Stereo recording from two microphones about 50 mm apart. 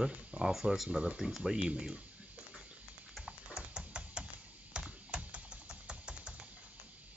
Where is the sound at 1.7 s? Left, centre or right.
Centre.